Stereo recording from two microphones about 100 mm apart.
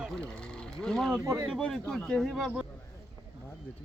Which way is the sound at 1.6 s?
10° left (ahead or behind).